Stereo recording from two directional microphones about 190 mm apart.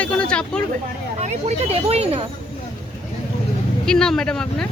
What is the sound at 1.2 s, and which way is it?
Speech, 35° right (ahead or behind).